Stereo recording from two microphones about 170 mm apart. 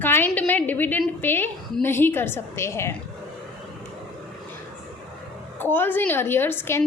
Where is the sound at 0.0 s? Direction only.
10° left (ahead or behind).